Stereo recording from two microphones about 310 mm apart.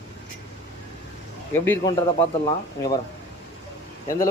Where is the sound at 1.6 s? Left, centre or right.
Centre.